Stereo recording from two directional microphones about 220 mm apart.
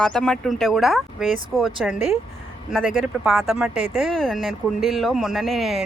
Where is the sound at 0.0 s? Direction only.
5° left (ahead or behind).